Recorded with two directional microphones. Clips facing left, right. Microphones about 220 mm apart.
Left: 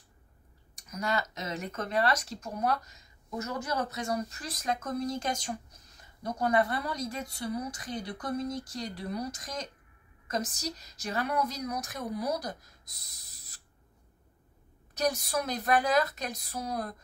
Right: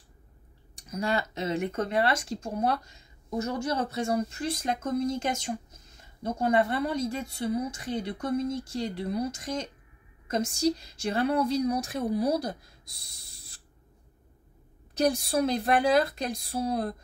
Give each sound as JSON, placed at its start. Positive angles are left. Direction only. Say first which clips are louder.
{"t": 0.7, "sound": "speech", "louder": "right 3 dB", "side_deg": -30}
{"t": 15.0, "sound": "speech", "louder": "right 5 dB", "side_deg": -30}